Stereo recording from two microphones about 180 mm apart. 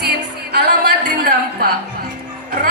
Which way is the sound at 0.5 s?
65° right (ahead or behind).